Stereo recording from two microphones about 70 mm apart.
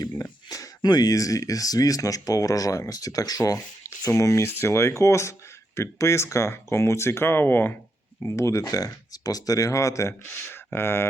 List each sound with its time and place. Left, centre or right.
0.0 s a sound: left
0.9 s speech: left
1.1 s speech: left
4.4 s speech: left
8.2 s speech: left
10.2 s speech: left